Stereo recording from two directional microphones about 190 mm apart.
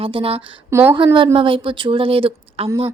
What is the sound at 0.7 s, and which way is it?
Speech, 10° right (ahead or behind).